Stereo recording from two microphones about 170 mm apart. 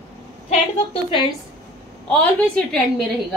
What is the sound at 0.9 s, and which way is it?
Speech, 30° left (ahead or behind).